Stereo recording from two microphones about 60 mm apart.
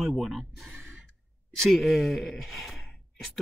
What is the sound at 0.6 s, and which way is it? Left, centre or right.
Gasp, right.